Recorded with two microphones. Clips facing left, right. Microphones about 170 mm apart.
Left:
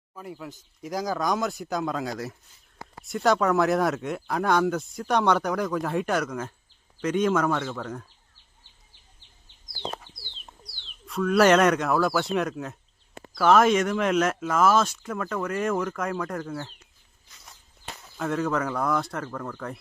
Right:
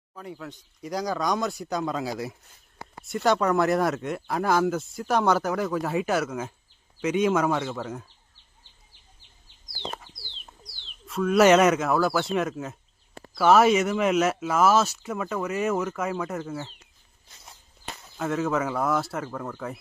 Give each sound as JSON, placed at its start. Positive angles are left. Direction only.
{"t": 0.1, "sound": "speech", "side_deg": 5}
{"t": 3.2, "sound": "speech", "side_deg": 0}
{"t": 10.8, "sound": "speech", "side_deg": -5}
{"t": 17.2, "sound": "walk", "side_deg": -30}
{"t": 18.2, "sound": "speech", "side_deg": -5}